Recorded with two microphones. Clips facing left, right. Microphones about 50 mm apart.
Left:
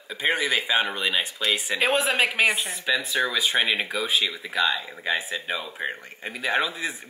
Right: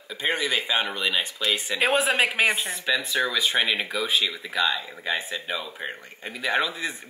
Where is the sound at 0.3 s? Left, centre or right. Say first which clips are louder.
Left 2 dB; centre.